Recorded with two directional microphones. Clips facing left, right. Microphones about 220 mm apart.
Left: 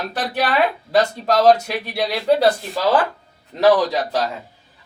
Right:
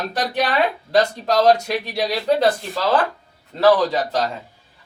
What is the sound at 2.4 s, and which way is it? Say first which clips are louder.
A man's voice: left 1 dB; 15° left (ahead or behind).